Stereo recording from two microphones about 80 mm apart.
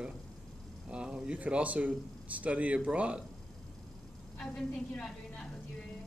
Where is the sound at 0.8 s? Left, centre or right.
Centre.